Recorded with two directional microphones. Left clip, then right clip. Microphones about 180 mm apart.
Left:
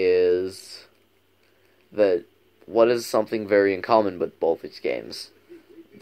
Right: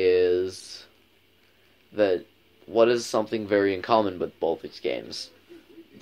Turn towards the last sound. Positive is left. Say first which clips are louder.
# left 2 dB
turn(degrees=40)  # may be behind; listen again after turning